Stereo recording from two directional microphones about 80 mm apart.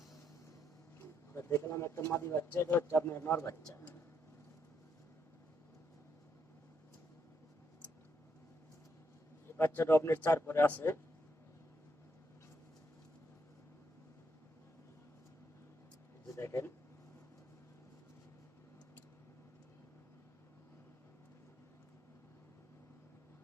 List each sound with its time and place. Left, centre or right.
0.9 s speech: left
9.6 s speech: left
16.3 s a sound: left